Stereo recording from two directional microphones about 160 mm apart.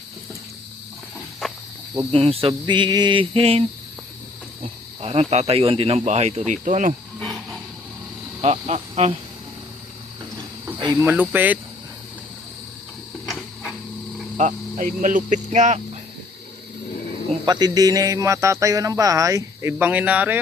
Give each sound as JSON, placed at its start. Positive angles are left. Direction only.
{"t": 1.4, "sound": "cricket", "side_deg": 0}
{"t": 2.1, "sound": "speech", "side_deg": -40}
{"t": 4.6, "sound": "wild animals", "side_deg": -40}
{"t": 5.3, "sound": "speech", "side_deg": -40}
{"t": 7.2, "sound": "insect", "side_deg": 0}
{"t": 8.4, "sound": "insect", "side_deg": -45}
{"t": 10.9, "sound": "speech", "side_deg": -10}
{"t": 13.2, "sound": "printer", "side_deg": 0}
{"t": 14.3, "sound": "speech", "side_deg": -50}
{"t": 17.4, "sound": "a man's voice", "side_deg": -25}